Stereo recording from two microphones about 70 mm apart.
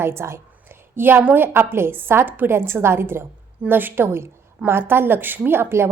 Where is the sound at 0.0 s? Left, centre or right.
Right.